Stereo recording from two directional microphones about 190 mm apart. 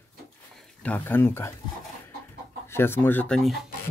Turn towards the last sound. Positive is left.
turn(degrees=0)  # may be behind; listen again after turning